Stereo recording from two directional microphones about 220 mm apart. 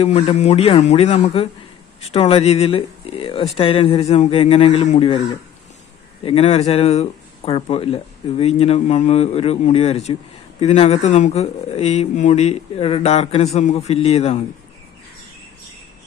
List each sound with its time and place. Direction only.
0.0 s speech: 25° left (ahead or behind)
6.2 s speech: 25° left (ahead or behind)